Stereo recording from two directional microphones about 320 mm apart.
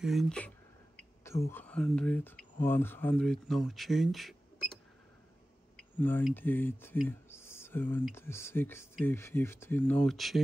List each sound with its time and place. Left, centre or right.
0.0 s speech: centre
1.5 s speech: centre
5.9 s speech: centre